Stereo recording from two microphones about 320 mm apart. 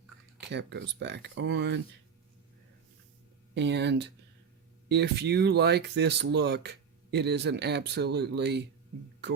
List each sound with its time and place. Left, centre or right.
0.3 s speech: right
3.5 s speech: right